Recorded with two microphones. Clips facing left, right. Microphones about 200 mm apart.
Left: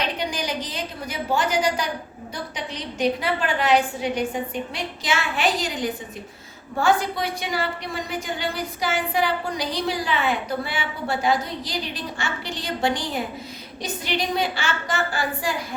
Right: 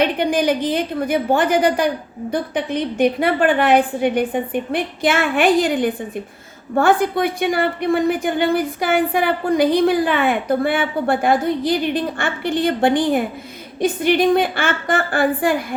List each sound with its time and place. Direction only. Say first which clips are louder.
0.0 s a woman's voice: right 10 dB; 55° right (ahead or behind)